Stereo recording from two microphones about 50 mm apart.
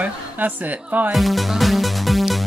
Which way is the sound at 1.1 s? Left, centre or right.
Centre.